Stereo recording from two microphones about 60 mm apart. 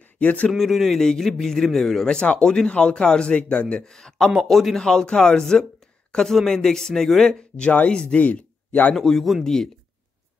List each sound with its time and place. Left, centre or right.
0.0 s a sound: left
0.5 s a man's voice: centre
4.4 s a man's voice: centre
4.8 s speech: centre
8.9 s a man's voice: centre